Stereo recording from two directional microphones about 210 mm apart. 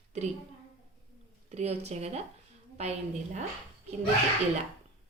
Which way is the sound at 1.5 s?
30° right (ahead or behind).